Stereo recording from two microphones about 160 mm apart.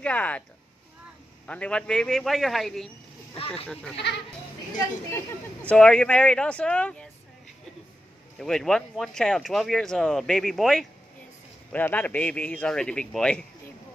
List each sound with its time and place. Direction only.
0.0 s speech: 10° left (ahead or behind)
1.5 s speech: 5° left (ahead or behind)
3.3 s speech: 35° left (ahead or behind)
3.6 s speech: 10° left (ahead or behind)
3.9 s speech: 90° left
5.1 s speech: 10° left (ahead or behind)
8.4 s speech: centre (ahead or behind)